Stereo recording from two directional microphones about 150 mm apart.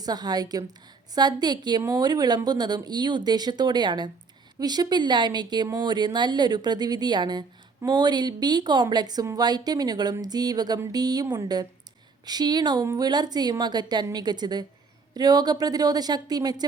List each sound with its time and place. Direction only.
0.0 s speech: 25° right (ahead or behind)